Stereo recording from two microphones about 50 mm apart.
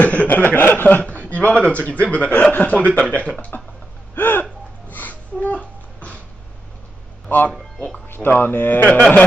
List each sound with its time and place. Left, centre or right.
0.0 s chuckle: left
1.1 s a man's voice: left
4.1 s a sound: left
7.2 s speech: left